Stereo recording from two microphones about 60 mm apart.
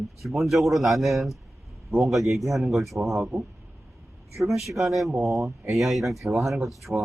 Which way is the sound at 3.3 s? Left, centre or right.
Right.